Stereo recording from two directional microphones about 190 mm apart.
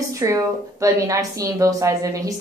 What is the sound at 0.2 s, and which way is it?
A woman's voice, 15° right (ahead or behind).